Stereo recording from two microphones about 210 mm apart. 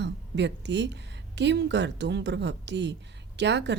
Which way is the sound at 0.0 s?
55° right (ahead or behind).